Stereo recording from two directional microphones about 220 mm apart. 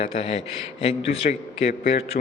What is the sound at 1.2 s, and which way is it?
Speech, 30° left (ahead or behind).